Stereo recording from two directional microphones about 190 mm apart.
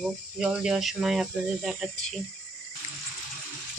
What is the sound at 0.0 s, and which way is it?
Speech, 5° right (ahead or behind).